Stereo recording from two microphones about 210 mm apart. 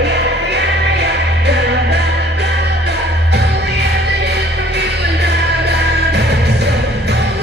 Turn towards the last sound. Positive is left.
turn(degrees=-50)  # may be behind; listen again after turning